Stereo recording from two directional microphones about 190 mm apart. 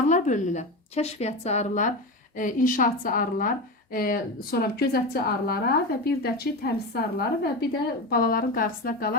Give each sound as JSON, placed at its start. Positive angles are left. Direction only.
{"t": 0.1, "sound": "a woman's voice", "side_deg": 40}